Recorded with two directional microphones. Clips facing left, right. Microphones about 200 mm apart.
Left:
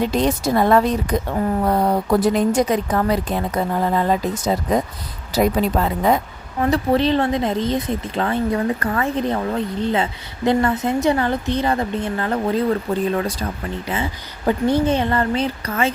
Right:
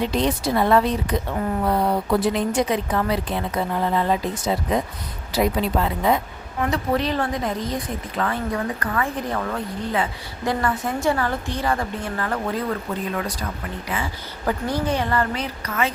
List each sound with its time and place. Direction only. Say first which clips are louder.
0.1 s a woman's voice: left 3 dB; 45° left (ahead or behind)
6.6 s speech: left 5 dB; 30° left (ahead or behind)
13.8 s speech: left 2 dB; 25° left (ahead or behind)